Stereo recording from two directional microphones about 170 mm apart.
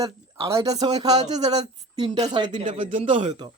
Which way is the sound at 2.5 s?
45° right (ahead or behind).